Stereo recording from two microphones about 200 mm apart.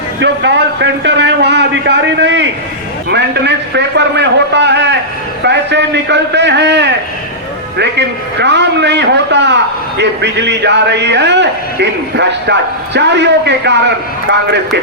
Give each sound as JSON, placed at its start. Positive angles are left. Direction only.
{"t": 0.2, "sound": "a man's voice", "side_deg": -60}